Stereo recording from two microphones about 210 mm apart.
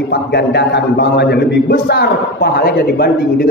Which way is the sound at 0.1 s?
55° left (ahead or behind).